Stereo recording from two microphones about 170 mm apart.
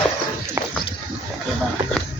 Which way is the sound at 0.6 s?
15° right (ahead or behind).